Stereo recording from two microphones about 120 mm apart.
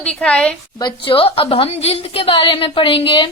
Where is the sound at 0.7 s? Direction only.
40° left (ahead or behind).